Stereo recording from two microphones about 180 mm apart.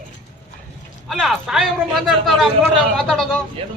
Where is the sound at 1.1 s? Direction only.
Centre (ahead or behind).